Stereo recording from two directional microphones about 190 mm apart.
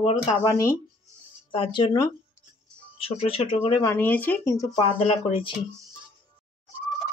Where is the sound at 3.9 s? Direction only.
10° left (ahead or behind).